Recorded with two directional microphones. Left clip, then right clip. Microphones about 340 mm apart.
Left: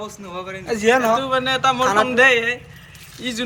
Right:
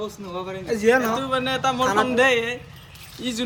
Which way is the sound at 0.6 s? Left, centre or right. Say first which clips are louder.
Left 3 dB; centre.